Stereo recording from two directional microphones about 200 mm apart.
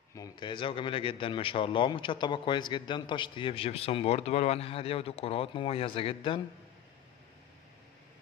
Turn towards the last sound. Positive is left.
turn(degrees=25)  # may be behind; listen again after turning